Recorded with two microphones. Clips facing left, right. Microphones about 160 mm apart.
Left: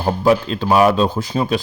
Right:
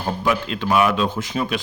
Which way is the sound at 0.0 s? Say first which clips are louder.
Left 7 dB; 35° left (ahead or behind).